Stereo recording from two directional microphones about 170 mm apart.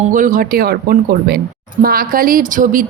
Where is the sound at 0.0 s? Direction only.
50° right (ahead or behind).